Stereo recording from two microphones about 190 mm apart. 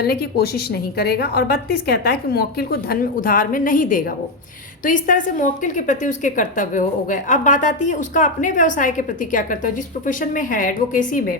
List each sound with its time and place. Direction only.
0.0 s a woman's voice: 55° left (ahead or behind)